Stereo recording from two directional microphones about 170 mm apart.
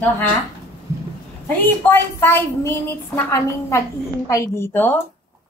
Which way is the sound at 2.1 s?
15° left (ahead or behind).